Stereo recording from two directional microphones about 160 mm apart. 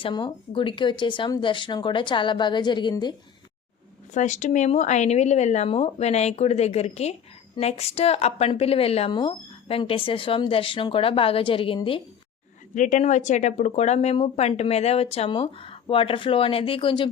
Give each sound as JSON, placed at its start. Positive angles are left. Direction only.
{"t": 0.0, "sound": "speech", "side_deg": 30}
{"t": 4.1, "sound": "speech", "side_deg": 50}
{"t": 12.7, "sound": "speech", "side_deg": 50}